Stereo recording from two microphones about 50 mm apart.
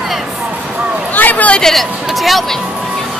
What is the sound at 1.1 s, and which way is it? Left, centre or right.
Speech, left.